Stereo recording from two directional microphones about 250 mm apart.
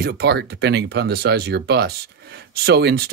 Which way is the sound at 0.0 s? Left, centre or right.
Right.